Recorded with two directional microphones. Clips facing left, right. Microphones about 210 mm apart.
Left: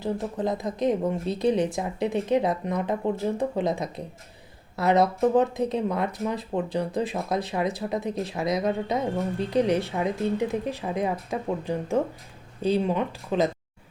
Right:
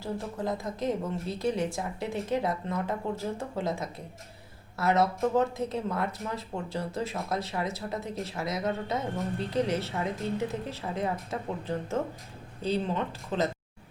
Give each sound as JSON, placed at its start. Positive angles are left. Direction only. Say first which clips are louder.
{"t": 0.0, "sound": "speech", "louder": "left 5 dB", "side_deg": 20}